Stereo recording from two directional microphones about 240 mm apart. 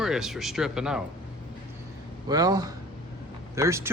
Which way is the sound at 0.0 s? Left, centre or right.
Centre.